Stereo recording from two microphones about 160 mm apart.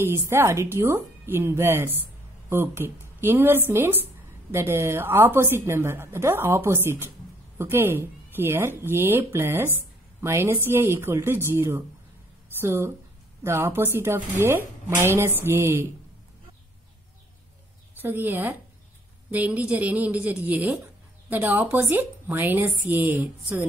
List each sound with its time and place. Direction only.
0.3 s speech: 15° right (ahead or behind)
17.9 s speech: 10° right (ahead or behind)